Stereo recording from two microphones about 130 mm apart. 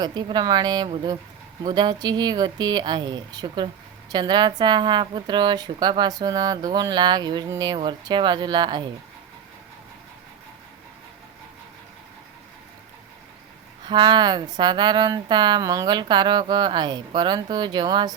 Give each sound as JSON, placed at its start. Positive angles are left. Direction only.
{"t": 0.0, "sound": "speech", "side_deg": -35}
{"t": 13.8, "sound": "speech", "side_deg": -35}